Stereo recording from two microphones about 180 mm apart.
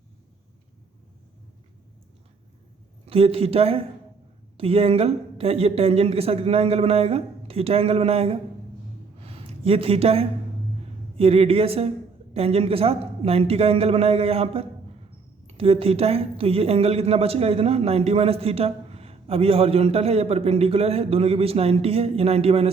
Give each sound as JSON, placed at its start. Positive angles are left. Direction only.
{"t": 3.1, "sound": "speech", "side_deg": -30}
{"t": 9.2, "sound": "a sound", "side_deg": -35}
{"t": 11.2, "sound": "speech", "side_deg": -30}